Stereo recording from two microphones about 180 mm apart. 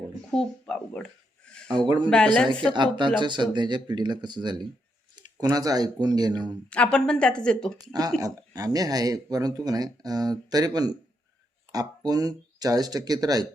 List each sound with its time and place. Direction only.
0.3 s a sound: 5° left (ahead or behind)
2.0 s a woman's voice: 5° left (ahead or behind)
2.7 s speech: 25° right (ahead or behind)
6.7 s a woman's voice: 5° left (ahead or behind)
8.2 s speech: 20° right (ahead or behind)